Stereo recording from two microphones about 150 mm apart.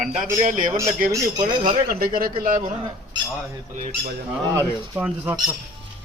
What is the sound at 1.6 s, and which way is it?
Speech, 80° right.